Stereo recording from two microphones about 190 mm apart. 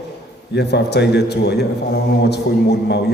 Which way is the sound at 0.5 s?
60° left (ahead or behind).